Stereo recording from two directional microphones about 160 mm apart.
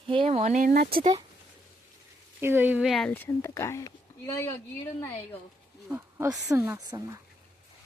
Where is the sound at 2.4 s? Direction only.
15° right (ahead or behind).